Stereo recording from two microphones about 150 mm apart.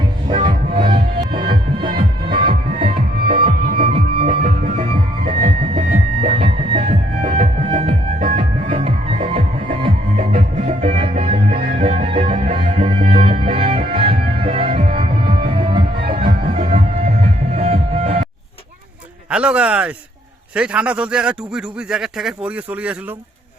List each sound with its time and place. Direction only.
0.3 s music: 35° right (ahead or behind); by 5.5 s 55° right (ahead or behind)
5.7 s music: 45° right (ahead or behind)
6.8 s music: 55° right (ahead or behind)
8.7 s music: 40° right (ahead or behind)
11.8 s music: 40° right (ahead or behind)
16.1 s music: 70° right (ahead or behind)
16.5 s music: 45° right (ahead or behind)
19.3 s speech: 5° right (ahead or behind)